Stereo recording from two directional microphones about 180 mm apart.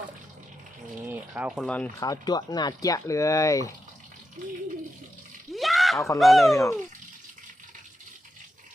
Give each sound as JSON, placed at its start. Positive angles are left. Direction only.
{"t": 1.0, "sound": "a sound", "side_deg": -10}
{"t": 1.6, "sound": "speech", "side_deg": 5}
{"t": 2.0, "sound": "speech", "side_deg": 20}
{"t": 5.5, "sound": "a sound", "side_deg": 0}
{"t": 6.1, "sound": "speech", "side_deg": 0}
{"t": 6.6, "sound": "speech", "side_deg": 15}